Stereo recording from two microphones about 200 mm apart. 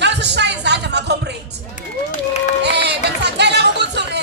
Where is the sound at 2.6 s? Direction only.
60° right (ahead or behind).